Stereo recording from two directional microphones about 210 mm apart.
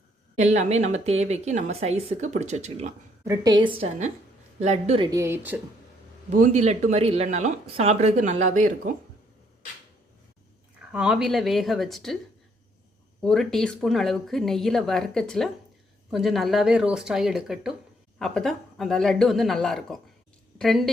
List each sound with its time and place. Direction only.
0.3 s speech: 35° right (ahead or behind)
3.2 s a woman's voice: 20° right (ahead or behind)
5.1 s speech: 10° right (ahead or behind)
6.3 s speech: 35° right (ahead or behind)
10.9 s a woman's voice: 5° right (ahead or behind)
13.2 s a woman's voice: centre (ahead or behind)